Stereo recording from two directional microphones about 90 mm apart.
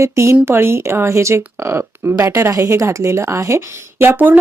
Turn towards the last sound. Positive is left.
turn(degrees=-20)  # may be behind; listen again after turning